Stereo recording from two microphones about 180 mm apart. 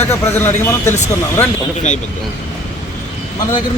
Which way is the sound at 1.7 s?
40° left (ahead or behind).